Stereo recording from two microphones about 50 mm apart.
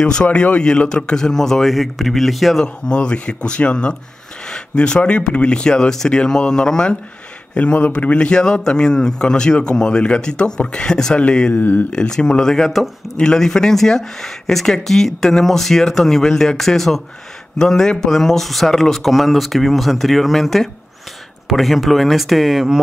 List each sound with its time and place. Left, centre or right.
0.0 s speech: left; by 2.6 s centre
2.6 s a man's voice: centre
13.2 s speech: centre